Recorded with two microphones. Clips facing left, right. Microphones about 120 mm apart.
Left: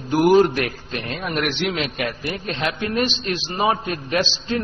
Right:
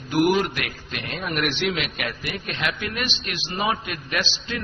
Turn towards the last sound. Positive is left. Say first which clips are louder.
# left 6 dB
turn(degrees=30)  # may be behind; listen again after turning